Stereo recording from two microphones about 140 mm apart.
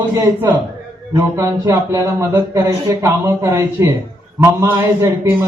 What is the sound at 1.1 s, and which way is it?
Speech, 20° right (ahead or behind).